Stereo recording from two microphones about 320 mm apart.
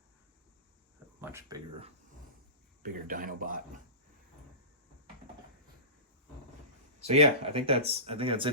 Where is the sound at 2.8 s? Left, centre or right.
Right.